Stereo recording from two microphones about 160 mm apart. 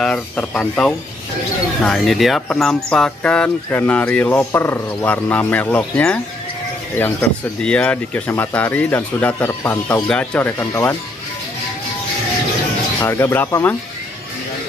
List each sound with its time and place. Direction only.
0.0 s speech: 5° left (ahead or behind)
7.6 s speech: 5° left (ahead or behind)
13.0 s speech: 15° left (ahead or behind)